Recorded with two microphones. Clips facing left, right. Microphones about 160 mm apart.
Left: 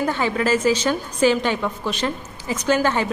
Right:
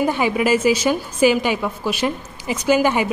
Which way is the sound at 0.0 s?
15° right (ahead or behind).